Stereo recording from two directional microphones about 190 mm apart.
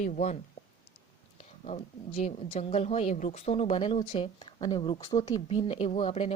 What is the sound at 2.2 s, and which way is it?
Speech, 30° left (ahead or behind).